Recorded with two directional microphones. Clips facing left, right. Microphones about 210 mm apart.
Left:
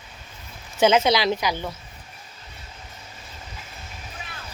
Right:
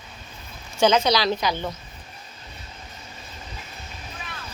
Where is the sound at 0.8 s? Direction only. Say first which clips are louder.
Left 1 dB; 20° left (ahead or behind).